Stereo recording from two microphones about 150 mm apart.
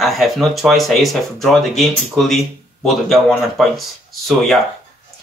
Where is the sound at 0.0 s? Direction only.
Centre (ahead or behind).